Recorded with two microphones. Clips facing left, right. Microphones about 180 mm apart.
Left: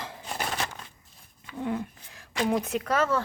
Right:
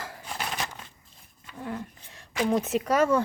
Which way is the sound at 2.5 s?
Centre (ahead or behind).